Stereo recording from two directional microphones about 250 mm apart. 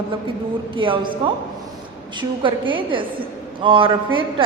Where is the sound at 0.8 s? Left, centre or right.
Centre.